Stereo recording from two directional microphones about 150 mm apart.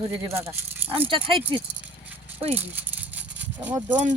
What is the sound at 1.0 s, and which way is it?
Speech, 35° right (ahead or behind).